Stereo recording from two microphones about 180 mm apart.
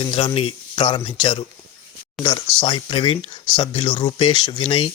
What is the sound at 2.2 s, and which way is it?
Speech, centre (ahead or behind).